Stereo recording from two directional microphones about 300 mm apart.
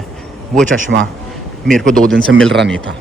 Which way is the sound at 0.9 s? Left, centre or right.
Right.